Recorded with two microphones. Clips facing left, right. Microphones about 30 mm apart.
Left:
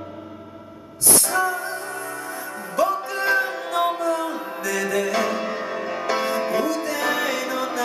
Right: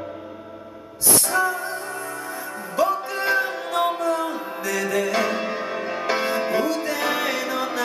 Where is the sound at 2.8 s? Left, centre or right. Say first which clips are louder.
Even; centre.